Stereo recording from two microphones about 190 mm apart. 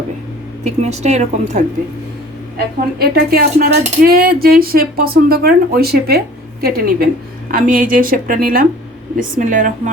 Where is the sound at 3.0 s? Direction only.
55° right (ahead or behind).